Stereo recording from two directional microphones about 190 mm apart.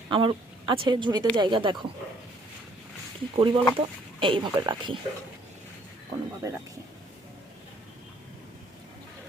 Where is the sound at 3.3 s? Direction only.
25° right (ahead or behind).